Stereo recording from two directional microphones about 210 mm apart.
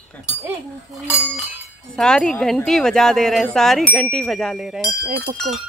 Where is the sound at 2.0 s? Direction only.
5° left (ahead or behind).